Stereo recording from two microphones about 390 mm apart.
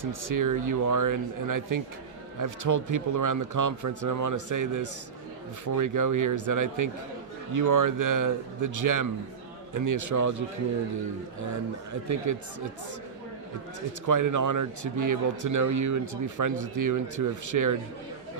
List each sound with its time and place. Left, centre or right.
0.0 s speech: right
11.9 s speech: right
14.0 s speech: right